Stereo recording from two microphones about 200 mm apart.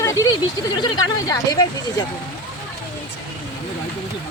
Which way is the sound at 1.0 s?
20° left (ahead or behind).